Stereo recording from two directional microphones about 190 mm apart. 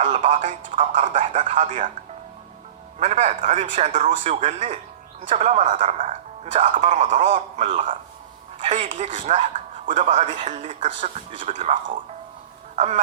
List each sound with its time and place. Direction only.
0.0 s speech: 40° right (ahead or behind)
3.0 s speech: 40° right (ahead or behind)
12.7 s honk: 35° right (ahead or behind)